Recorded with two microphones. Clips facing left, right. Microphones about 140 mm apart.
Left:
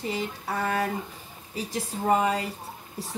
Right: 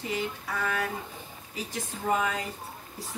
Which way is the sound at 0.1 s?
35° left (ahead or behind).